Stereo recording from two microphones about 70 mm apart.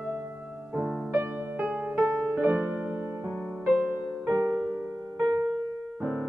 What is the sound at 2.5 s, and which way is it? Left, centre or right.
Music, right.